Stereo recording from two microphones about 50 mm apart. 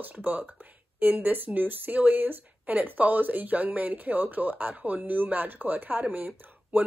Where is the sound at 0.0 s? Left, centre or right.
Right.